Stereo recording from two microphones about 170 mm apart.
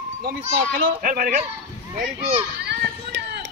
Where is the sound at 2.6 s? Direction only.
85° right.